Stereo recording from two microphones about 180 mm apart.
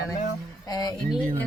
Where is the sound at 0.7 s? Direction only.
20° left (ahead or behind).